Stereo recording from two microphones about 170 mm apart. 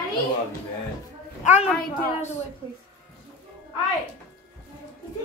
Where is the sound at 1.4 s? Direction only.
45° left (ahead or behind).